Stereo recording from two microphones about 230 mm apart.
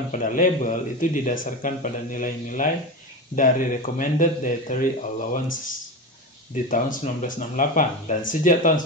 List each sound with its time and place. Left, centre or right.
0.1 s a man's voice: left